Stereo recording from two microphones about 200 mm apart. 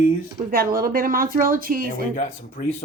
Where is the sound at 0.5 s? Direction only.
45° right (ahead or behind).